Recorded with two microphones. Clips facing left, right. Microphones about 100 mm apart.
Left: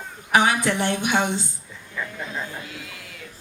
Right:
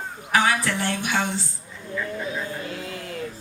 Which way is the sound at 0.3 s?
20° left (ahead or behind).